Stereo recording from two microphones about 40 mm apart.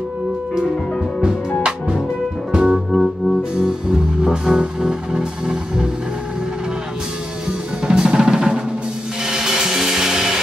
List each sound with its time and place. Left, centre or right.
2.5 s music: centre
2.9 s music: centre
3.5 s music: centre
7.8 s drum: centre
9.2 s music: centre